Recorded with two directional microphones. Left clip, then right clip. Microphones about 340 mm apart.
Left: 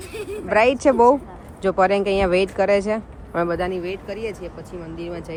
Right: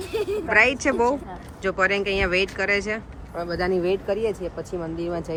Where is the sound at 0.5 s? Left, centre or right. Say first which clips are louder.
Left 3 dB; centre.